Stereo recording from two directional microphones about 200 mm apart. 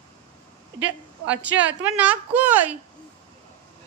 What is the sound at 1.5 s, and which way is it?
Speech, 65° right (ahead or behind).